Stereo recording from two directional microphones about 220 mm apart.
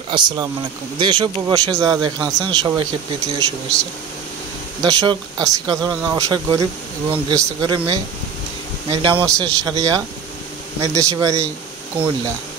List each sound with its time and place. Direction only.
0.1 s speech: 20° right (ahead or behind)
4.8 s speech: 15° right (ahead or behind)